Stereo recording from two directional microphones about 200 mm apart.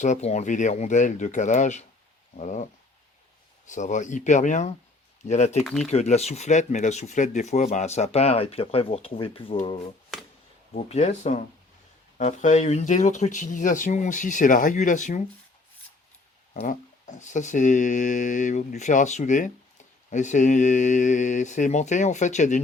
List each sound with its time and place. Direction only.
0.0 s speech: 35° left (ahead or behind)
3.7 s speech: 40° left (ahead or behind)
5.6 s speech: centre (ahead or behind)
5.9 s speech: 35° left (ahead or behind)
16.6 s speech: 40° left (ahead or behind)